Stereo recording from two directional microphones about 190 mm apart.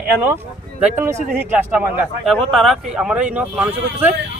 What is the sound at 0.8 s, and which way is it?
Speech, 10° right (ahead or behind).